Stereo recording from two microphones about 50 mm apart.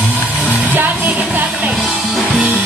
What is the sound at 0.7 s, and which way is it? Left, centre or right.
Music, right.